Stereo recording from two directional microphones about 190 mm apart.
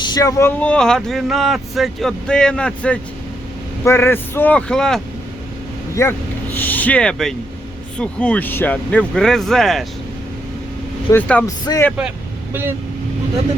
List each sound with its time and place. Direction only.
0.0 s speech: 20° left (ahead or behind); by 5.0 s 5° left (ahead or behind)
5.9 s speech: 15° left (ahead or behind)
11.1 s speech: 10° left (ahead or behind)
11.6 s speech: 20° left (ahead or behind)
11.9 s speech: 5° right (ahead or behind)